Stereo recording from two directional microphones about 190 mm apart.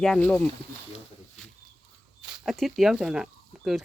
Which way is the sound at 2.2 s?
5° right (ahead or behind).